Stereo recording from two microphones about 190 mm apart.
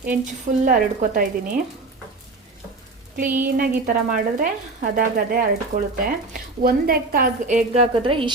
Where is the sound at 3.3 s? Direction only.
50° right (ahead or behind).